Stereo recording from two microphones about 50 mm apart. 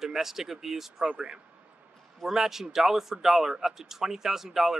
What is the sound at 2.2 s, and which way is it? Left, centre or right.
Speech, centre.